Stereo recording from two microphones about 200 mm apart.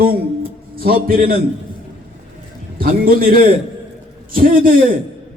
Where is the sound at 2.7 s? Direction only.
45° right (ahead or behind).